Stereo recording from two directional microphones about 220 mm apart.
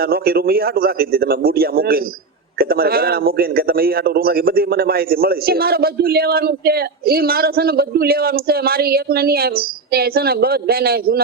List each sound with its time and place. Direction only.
0.0 s a man's voice: 45° right (ahead or behind)